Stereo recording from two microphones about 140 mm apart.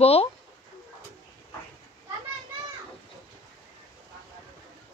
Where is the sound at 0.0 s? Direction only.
45° left (ahead or behind).